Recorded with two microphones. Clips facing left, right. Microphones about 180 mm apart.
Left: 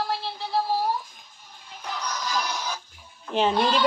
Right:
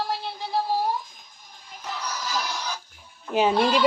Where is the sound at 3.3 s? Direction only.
5° right (ahead or behind).